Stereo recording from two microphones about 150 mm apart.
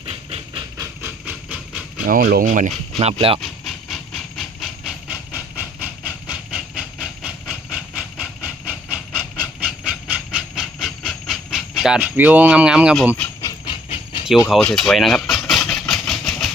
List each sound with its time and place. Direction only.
0.0 s engine: 40° right (ahead or behind)
0.8 s steam: 10° right (ahead or behind)
2.0 s speech: 65° right (ahead or behind)
3.0 s speech: 40° right (ahead or behind)
3.4 s train: centre (ahead or behind)
9.6 s steam: 10° right (ahead or behind)
13.4 s train: 30° left (ahead or behind)
14.6 s vehicle: 5° left (ahead or behind)